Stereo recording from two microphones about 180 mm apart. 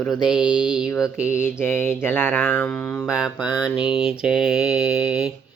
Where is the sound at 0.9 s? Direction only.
20° left (ahead or behind).